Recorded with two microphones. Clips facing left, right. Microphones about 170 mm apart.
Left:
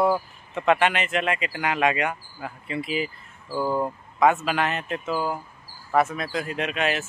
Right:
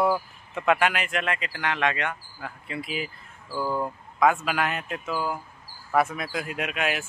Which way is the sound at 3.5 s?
15° left (ahead or behind).